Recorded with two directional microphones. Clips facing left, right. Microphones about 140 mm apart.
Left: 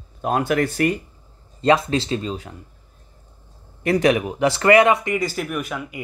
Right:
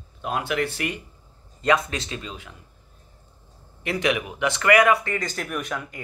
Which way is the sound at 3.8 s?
40° left (ahead or behind).